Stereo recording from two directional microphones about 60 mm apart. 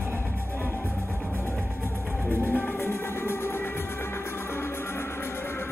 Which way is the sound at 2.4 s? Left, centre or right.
Left.